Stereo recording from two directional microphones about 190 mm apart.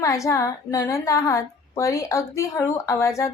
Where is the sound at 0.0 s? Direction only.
15° left (ahead or behind).